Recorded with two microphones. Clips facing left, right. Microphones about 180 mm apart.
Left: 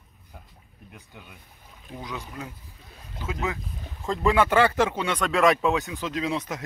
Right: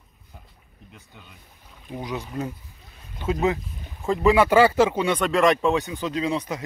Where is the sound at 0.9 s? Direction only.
10° left (ahead or behind).